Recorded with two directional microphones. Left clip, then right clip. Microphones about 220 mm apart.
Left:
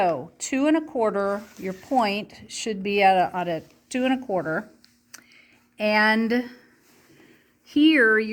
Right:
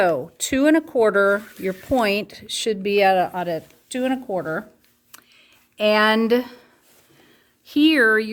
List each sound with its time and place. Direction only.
0.0 s a woman's voice: 25° right (ahead or behind); by 4.6 s centre (ahead or behind)
5.7 s speech: 15° right (ahead or behind)
7.7 s speech: 25° right (ahead or behind)